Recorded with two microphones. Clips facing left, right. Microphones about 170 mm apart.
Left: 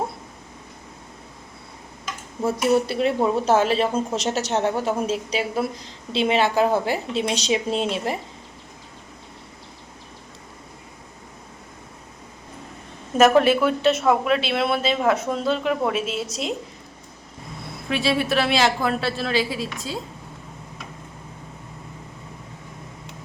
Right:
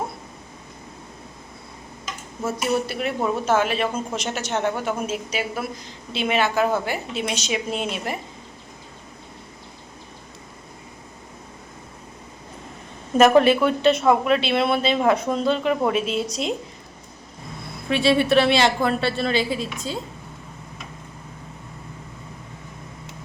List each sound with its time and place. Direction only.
2.7 s speech: 30° left (ahead or behind)
13.1 s speech: 5° left (ahead or behind)
17.8 s speech: centre (ahead or behind)